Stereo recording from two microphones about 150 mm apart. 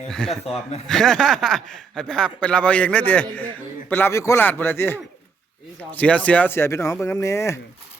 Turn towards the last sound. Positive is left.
turn(degrees=20)  # may be behind; listen again after turning